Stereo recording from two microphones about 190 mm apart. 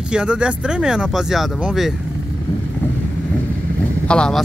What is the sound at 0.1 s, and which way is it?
Speech, 5° right (ahead or behind).